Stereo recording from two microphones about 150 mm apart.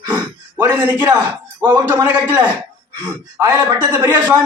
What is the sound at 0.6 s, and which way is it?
A man's voice, 15° right (ahead or behind).